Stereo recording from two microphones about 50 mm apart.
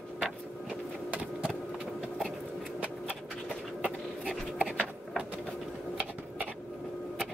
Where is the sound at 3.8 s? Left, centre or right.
Right.